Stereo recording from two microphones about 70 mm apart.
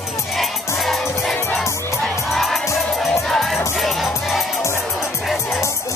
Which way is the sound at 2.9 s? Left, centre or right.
Centre.